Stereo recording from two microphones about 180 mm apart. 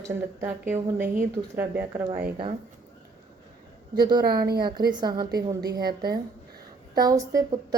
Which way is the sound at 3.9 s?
20° right (ahead or behind).